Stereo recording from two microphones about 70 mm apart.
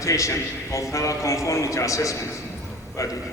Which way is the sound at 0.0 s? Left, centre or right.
Left.